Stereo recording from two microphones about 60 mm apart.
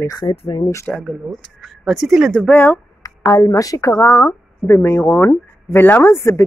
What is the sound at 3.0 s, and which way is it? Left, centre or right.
A woman's voice, left.